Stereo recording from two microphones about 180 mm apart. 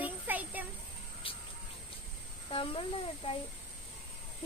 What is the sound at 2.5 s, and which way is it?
Speech, 30° left (ahead or behind).